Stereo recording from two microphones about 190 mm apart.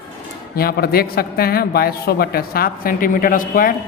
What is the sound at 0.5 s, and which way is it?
Speech, 55° left (ahead or behind).